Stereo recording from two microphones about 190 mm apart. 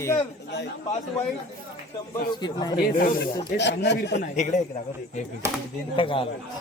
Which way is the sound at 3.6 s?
65° left (ahead or behind).